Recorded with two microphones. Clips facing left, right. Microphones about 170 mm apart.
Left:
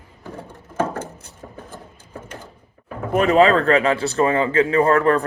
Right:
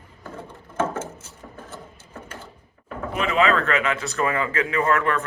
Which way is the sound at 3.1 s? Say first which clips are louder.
Left 7 dB; 45° left (ahead or behind).